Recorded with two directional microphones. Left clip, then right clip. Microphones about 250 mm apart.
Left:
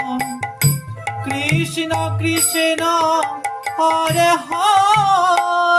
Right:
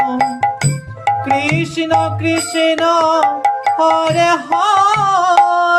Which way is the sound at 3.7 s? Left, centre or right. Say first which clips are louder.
Left 1 dB; left.